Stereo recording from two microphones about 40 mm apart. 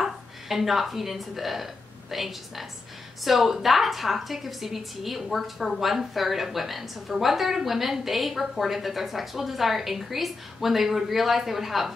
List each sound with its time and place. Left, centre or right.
0.0 s a woman's voice: centre